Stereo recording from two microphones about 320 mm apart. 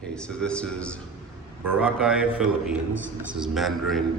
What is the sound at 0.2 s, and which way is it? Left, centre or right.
A man's voice, centre.